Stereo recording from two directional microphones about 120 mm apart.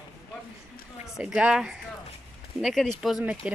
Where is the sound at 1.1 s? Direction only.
5° right (ahead or behind).